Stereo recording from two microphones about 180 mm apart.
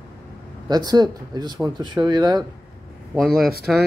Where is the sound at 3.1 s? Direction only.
Centre (ahead or behind).